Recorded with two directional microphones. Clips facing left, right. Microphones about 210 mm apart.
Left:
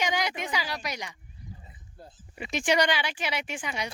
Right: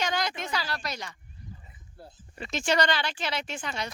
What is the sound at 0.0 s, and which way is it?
Speech, 15° left (ahead or behind).